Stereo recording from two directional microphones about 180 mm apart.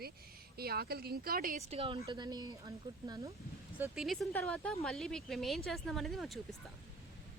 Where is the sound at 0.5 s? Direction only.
60° right (ahead or behind).